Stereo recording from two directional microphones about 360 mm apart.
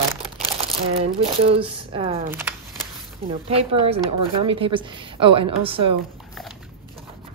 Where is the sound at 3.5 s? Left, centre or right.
Centre.